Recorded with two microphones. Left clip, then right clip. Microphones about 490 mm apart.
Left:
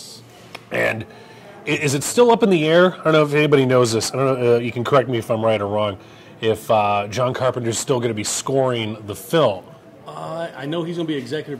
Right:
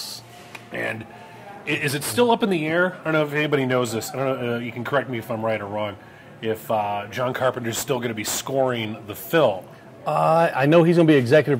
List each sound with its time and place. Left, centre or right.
0.7 s music: left
1.7 s speech: left
10.0 s a man's voice: right